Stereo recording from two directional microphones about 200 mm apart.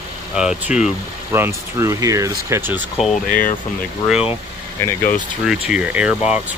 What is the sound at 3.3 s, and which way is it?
Speech, 45° left (ahead or behind).